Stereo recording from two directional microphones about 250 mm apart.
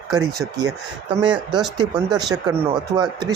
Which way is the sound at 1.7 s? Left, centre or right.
Centre.